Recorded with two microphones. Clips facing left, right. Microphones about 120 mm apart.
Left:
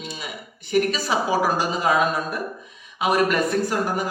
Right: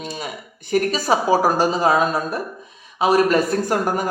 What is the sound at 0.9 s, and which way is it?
Speech, 40° right (ahead or behind).